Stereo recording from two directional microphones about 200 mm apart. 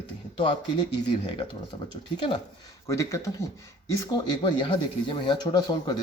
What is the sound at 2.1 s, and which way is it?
Speech, 25° left (ahead or behind).